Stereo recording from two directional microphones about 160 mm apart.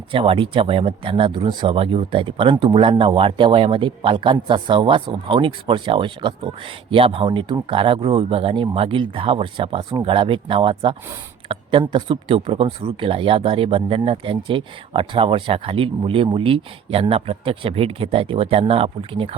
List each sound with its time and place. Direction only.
0.1 s speech: 35° right (ahead or behind)